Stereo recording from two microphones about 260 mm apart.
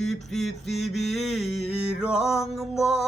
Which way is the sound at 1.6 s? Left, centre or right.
Left.